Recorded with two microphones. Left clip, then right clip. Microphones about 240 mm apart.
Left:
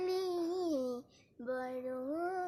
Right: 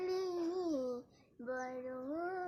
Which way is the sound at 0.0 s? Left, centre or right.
Left.